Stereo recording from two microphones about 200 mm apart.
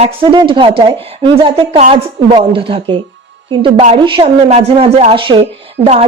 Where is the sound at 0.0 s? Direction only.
25° right (ahead or behind).